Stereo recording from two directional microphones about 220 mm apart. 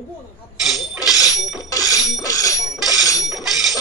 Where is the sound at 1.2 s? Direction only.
15° left (ahead or behind).